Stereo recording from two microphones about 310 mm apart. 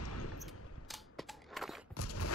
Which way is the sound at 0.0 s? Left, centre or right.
Left.